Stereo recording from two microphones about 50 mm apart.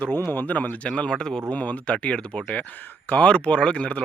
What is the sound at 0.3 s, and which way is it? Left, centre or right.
Speech, left.